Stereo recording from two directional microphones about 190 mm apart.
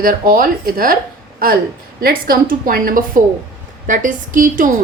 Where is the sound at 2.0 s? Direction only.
50° right (ahead or behind).